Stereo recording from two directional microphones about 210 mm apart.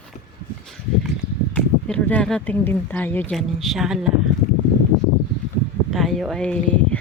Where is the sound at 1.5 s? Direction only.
5° left (ahead or behind).